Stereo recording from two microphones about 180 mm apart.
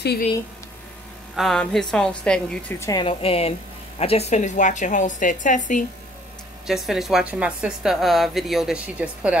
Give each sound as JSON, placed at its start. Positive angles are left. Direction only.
{"t": 1.3, "sound": "a woman's voice", "side_deg": 0}
{"t": 2.8, "sound": "a woman's voice", "side_deg": 25}
{"t": 6.7, "sound": "a woman's voice", "side_deg": 0}